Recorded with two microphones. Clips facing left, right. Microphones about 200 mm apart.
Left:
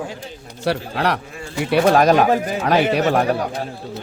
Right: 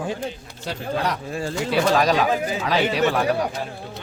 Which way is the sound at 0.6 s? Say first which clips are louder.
Left 4 dB; 70° left (ahead or behind).